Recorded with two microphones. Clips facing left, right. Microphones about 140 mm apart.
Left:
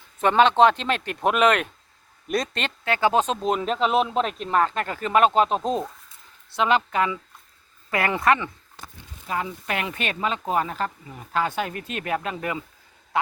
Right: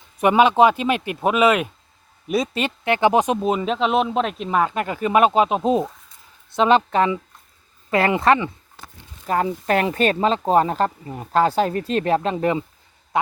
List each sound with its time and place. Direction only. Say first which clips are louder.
0.2 s a man's voice: right 2 dB; 10° right (ahead or behind)
2.8 s speech: right 4 dB; 20° right (ahead or behind)
6.6 s speech: right 5 dB; 20° right (ahead or behind)
9.2 s speech: right 8 dB; 45° right (ahead or behind); by 12.6 s 30° right (ahead or behind)